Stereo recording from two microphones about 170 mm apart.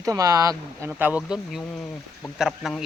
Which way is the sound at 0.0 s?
20° right (ahead or behind).